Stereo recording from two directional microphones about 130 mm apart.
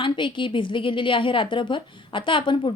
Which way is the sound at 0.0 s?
40° left (ahead or behind).